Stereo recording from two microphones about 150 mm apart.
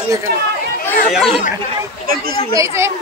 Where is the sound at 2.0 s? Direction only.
75° right (ahead or behind).